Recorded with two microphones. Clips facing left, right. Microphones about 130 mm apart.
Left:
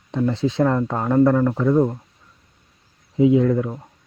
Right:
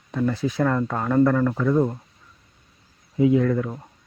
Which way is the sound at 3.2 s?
15° left (ahead or behind).